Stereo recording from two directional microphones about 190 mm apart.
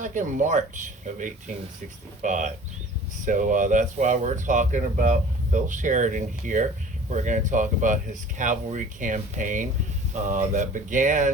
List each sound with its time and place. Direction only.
0.0 s speech: 40° right (ahead or behind)